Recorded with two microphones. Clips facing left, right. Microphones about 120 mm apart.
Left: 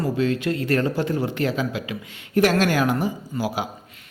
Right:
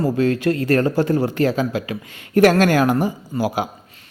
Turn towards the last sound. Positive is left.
turn(degrees=-50)  # may be behind; listen again after turning